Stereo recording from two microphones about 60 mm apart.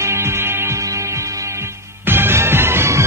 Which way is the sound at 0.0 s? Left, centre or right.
Right.